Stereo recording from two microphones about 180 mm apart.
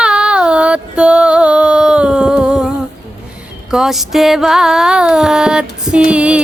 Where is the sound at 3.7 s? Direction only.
Centre (ahead or behind).